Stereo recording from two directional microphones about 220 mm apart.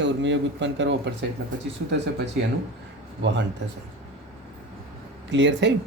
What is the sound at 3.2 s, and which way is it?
Speech, 55° right (ahead or behind).